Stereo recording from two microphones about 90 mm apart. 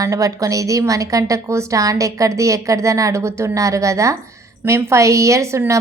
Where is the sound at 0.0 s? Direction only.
35° right (ahead or behind).